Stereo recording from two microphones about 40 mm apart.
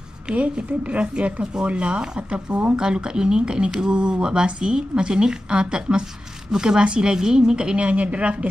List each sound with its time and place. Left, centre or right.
0.3 s speech: right